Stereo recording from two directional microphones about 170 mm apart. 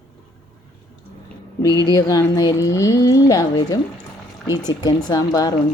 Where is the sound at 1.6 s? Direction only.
20° left (ahead or behind).